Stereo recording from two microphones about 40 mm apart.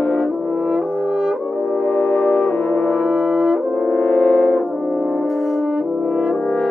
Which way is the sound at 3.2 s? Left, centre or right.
Centre.